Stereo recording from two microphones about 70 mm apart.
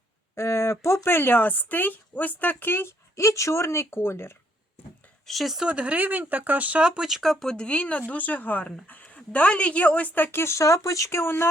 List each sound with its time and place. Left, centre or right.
0.3 s speech: left
5.2 s speech: centre
5.6 s speech: centre; by 10.2 s left
10.3 s speech: left